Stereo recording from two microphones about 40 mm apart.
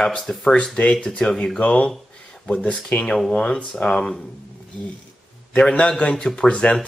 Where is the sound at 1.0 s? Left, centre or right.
Left.